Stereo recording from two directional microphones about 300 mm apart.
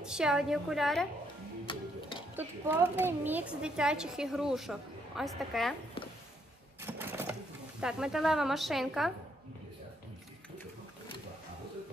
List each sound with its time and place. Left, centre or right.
0.0 s speech: centre
1.7 s music: centre
2.3 s speech: centre
6.8 s typewriter: centre
7.8 s speech: centre